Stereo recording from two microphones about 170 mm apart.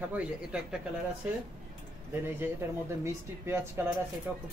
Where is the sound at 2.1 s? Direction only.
15° right (ahead or behind).